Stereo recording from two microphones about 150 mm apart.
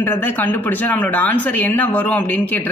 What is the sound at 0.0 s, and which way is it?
A man's voice, 15° left (ahead or behind).